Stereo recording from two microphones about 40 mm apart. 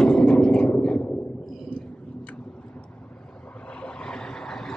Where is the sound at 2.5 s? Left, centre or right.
Left.